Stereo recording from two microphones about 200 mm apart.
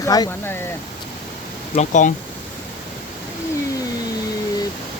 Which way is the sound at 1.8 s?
40° left (ahead or behind).